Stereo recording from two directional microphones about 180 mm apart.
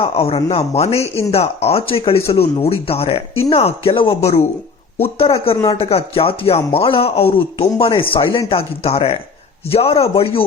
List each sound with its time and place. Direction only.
0.0 s speech: 30° left (ahead or behind)
5.6 s speech: 35° left (ahead or behind)